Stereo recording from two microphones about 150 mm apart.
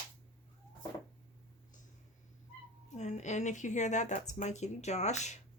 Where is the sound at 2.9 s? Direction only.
50° left (ahead or behind).